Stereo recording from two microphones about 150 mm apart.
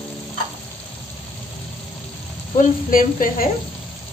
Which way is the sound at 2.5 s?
65° left (ahead or behind).